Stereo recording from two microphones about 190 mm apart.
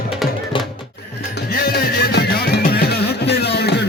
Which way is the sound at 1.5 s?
50° left (ahead or behind).